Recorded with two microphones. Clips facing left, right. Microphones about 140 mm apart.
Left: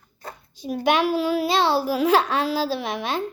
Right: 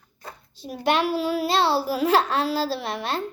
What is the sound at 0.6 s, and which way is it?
A child's voice, centre (ahead or behind).